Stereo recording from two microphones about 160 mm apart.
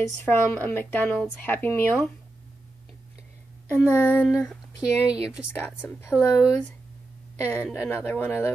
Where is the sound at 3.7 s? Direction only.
10° left (ahead or behind).